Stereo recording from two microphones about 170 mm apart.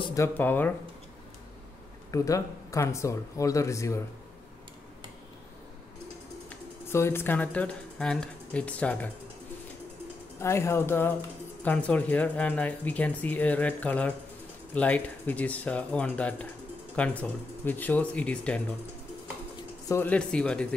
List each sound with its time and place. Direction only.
0.0 s speech: 20° left (ahead or behind)
2.0 s speech: 20° left (ahead or behind)
6.9 s speech: 15° left (ahead or behind)
10.4 s speech: 15° left (ahead or behind)
19.9 s speech: 10° left (ahead or behind)